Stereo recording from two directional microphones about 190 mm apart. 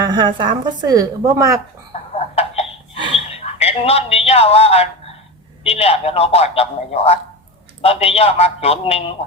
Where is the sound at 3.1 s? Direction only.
30° left (ahead or behind).